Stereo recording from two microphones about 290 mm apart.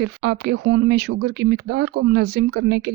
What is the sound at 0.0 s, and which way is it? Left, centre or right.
Speech, right.